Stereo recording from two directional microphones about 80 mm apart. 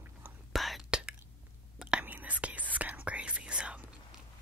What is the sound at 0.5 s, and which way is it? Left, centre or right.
Whispering, centre.